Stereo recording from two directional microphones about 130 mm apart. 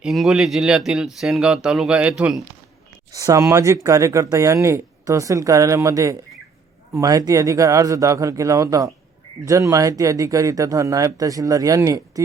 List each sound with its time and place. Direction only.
0.0 s speech: centre (ahead or behind)
3.1 s speech: 25° right (ahead or behind)